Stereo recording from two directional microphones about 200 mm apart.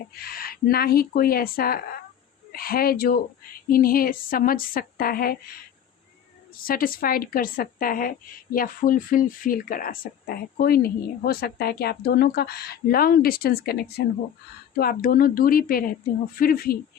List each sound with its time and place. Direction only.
0.1 s speech: 50° left (ahead or behind)
6.6 s speech: 45° left (ahead or behind)